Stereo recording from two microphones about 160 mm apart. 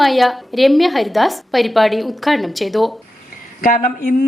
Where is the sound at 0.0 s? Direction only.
Centre (ahead or behind).